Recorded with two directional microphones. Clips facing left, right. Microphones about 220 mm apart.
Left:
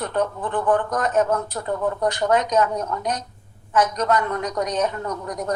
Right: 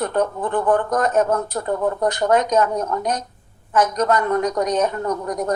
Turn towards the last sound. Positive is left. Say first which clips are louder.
# right 5 dB
turn(degrees=-50)  # may be behind; listen again after turning